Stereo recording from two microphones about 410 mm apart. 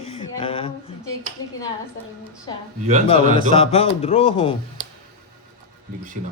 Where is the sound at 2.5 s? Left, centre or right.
Centre.